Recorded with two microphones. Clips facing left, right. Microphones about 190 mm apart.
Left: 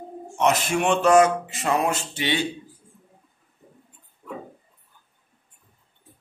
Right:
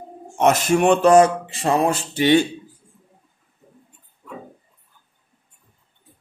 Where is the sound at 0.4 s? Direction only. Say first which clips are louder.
Right 5 dB; 45° right (ahead or behind).